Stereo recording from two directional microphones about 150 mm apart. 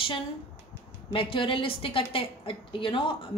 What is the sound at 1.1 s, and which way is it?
A woman's voice, 35° left (ahead or behind).